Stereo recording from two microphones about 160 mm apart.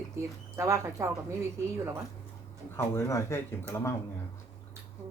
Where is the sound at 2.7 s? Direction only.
15° left (ahead or behind).